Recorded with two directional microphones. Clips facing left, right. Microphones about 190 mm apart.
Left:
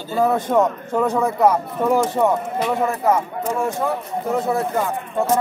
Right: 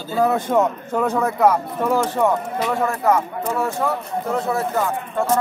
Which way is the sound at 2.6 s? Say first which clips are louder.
Left 1 dB; 20° left (ahead or behind).